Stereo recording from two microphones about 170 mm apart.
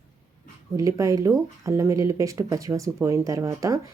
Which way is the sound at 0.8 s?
20° right (ahead or behind).